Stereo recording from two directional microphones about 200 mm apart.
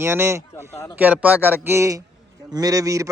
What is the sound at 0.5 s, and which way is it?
Speech, 15° left (ahead or behind).